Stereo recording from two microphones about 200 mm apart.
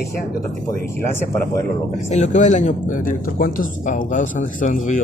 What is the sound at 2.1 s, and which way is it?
Speech, 35° left (ahead or behind).